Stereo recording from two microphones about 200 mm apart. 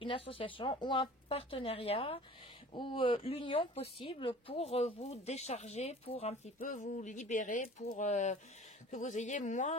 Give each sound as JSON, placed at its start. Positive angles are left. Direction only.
{"t": 0.0, "sound": "speech", "side_deg": 25}